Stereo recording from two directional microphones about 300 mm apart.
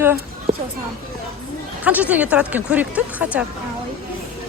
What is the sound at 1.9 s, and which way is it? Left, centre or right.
Speech, centre.